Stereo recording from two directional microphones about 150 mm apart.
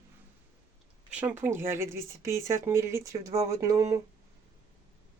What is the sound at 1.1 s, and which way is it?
Speech, 10° right (ahead or behind).